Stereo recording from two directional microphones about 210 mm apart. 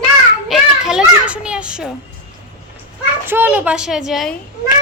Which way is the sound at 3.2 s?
10° right (ahead or behind).